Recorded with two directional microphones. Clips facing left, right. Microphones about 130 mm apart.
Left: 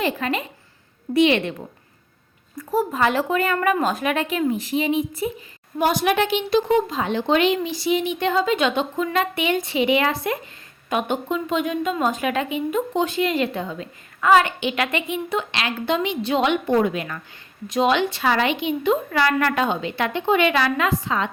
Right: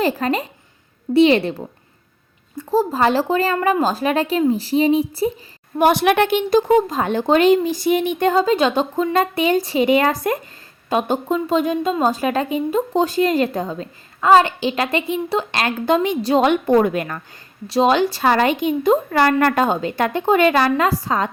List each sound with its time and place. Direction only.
0.0 s a woman's voice: 35° right (ahead or behind)
5.7 s a woman's voice: 65° right (ahead or behind); by 17.2 s 50° right (ahead or behind)
17.7 s a woman's voice: 35° right (ahead or behind)